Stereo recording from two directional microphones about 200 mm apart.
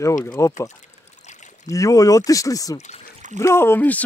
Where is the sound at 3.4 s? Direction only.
10° left (ahead or behind).